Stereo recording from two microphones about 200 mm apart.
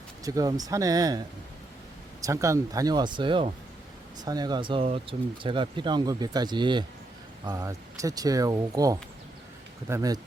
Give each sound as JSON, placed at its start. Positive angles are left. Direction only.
{"t": 0.3, "sound": "speech", "side_deg": -20}
{"t": 2.2, "sound": "speech", "side_deg": -15}